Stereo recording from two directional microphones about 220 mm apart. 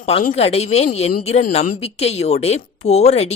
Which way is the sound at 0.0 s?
25° left (ahead or behind).